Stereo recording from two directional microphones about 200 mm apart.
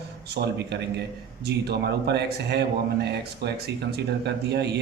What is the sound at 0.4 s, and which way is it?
A man's voice, 55° right (ahead or behind).